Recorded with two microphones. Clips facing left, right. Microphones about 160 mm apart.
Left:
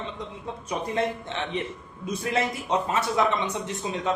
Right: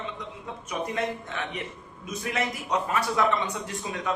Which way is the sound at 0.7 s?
30° left (ahead or behind).